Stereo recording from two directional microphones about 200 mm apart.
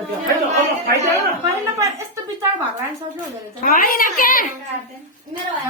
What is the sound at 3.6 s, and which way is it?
Speech, 45° left (ahead or behind).